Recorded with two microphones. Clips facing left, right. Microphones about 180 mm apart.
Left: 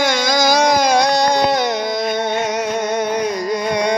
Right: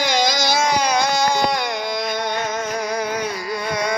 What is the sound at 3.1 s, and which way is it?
Carnatic music, 35° left (ahead or behind).